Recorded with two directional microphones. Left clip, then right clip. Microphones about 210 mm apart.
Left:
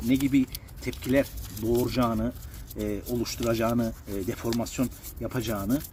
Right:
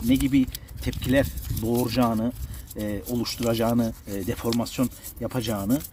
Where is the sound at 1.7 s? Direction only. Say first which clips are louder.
Right 2 dB; 45° right (ahead or behind).